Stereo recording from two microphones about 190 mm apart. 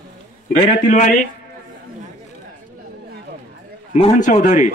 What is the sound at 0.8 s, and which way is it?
Speech, 40° left (ahead or behind).